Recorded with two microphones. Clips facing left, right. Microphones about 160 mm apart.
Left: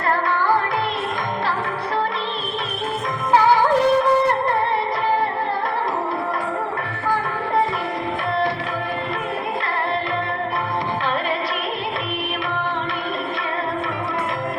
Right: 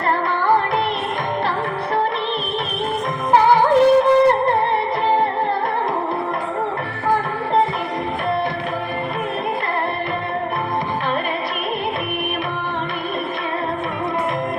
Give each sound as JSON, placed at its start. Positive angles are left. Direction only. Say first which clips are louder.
{"t": 3.3, "sound": "music", "louder": "right 2 dB", "side_deg": -20}